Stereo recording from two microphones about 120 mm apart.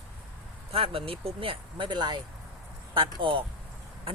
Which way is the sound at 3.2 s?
45° right (ahead or behind).